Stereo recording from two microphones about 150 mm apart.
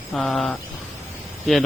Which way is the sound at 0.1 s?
Centre (ahead or behind).